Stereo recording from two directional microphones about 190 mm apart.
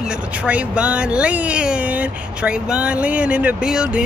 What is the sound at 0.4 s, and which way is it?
A woman's voice, 5° right (ahead or behind).